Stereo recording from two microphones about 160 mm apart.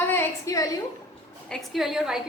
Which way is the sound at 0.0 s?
15° left (ahead or behind).